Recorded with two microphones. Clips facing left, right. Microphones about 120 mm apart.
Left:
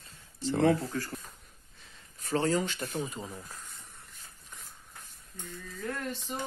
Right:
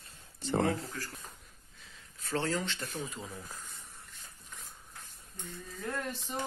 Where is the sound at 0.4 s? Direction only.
55° right (ahead or behind).